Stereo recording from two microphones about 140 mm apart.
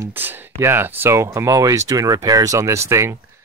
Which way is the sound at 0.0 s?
15° right (ahead or behind).